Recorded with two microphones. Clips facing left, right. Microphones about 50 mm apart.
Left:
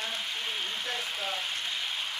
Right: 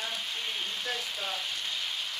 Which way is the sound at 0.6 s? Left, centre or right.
Left.